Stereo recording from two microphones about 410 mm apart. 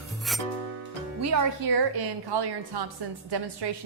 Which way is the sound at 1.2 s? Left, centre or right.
Right.